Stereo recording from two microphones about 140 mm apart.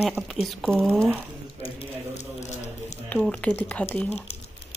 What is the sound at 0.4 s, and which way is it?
Speech, centre (ahead or behind).